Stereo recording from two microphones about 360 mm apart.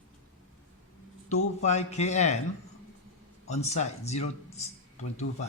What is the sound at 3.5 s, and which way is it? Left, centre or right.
Speech, centre.